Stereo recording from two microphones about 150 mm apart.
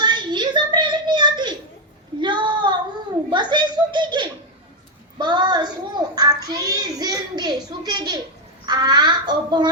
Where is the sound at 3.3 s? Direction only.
30° right (ahead or behind).